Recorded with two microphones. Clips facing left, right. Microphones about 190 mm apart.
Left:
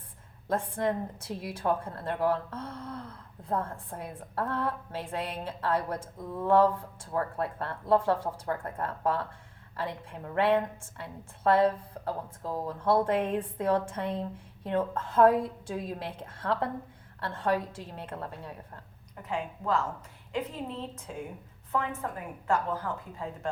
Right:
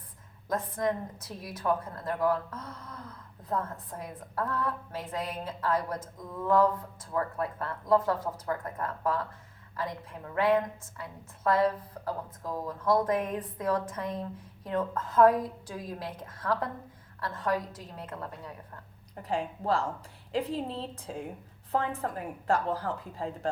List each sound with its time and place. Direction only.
0.4 s a woman's voice: 30° left (ahead or behind)
19.2 s a woman's voice: 35° right (ahead or behind)
22.4 s a woman's voice: 35° right (ahead or behind)